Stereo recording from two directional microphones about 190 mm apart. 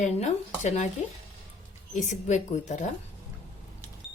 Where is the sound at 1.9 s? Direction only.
40° left (ahead or behind).